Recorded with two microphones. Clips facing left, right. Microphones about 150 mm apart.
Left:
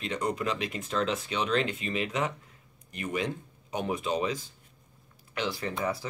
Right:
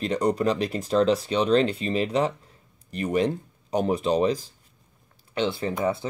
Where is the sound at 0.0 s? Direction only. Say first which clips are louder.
Right 8 dB; 35° right (ahead or behind).